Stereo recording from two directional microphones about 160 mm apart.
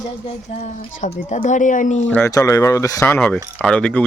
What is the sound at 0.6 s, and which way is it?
Speech, 50° left (ahead or behind).